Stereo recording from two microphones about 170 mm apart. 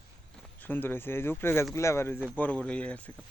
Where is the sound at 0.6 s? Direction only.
10° left (ahead or behind).